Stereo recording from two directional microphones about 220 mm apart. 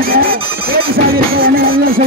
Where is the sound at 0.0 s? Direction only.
40° right (ahead or behind).